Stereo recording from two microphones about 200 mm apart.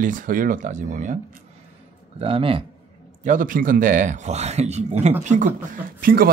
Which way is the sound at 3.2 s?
40° right (ahead or behind).